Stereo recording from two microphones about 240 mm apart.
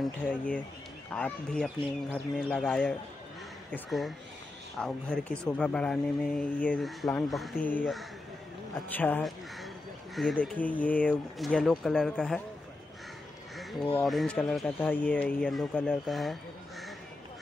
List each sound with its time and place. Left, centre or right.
0.0 s speech: centre
13.7 s speech: centre
14.0 s speech: centre